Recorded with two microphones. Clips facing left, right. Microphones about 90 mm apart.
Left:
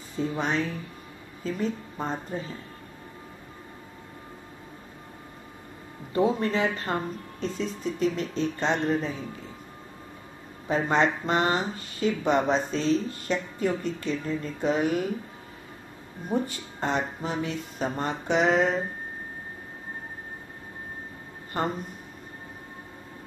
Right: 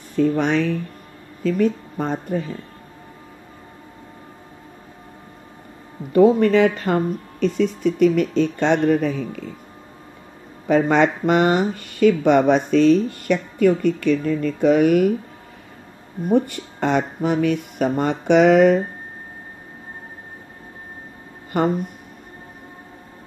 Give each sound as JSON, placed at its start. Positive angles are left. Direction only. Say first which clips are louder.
{"t": 0.1, "sound": "speech", "louder": "right 9 dB", "side_deg": -70}
{"t": 6.1, "sound": "speech", "louder": "right 11 dB", "side_deg": -70}
{"t": 10.7, "sound": "speech", "louder": "right 7 dB", "side_deg": -75}
{"t": 16.3, "sound": "speech", "louder": "right 9 dB", "side_deg": -65}